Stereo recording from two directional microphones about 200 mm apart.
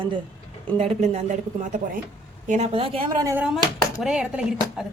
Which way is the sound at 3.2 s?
5° right (ahead or behind).